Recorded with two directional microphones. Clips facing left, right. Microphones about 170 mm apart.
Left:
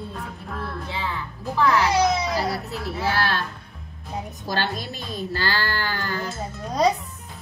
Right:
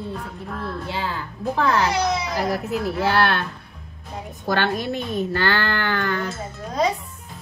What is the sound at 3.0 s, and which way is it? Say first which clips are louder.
Speech: right 3 dB; 60° right (ahead or behind).